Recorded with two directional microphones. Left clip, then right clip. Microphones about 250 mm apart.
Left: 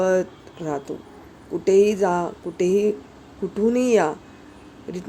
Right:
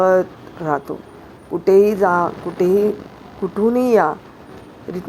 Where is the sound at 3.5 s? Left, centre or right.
Centre.